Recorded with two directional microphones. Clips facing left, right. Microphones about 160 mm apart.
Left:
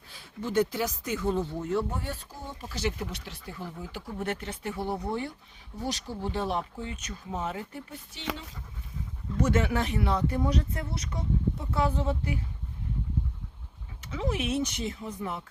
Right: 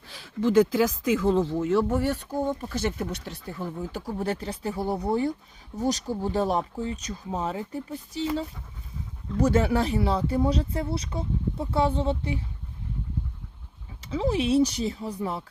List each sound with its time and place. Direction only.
0.1 s speech: 90° right
2.4 s speech: 55° right (ahead or behind)
3.9 s speech: 35° right (ahead or behind)
9.4 s speech: 35° right (ahead or behind)
14.0 s speech: 30° right (ahead or behind)